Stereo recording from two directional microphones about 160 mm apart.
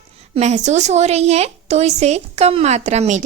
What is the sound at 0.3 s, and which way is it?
A woman's voice, 45° right (ahead or behind).